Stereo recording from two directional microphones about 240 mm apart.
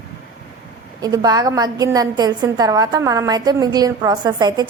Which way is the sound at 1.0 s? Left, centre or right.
Centre.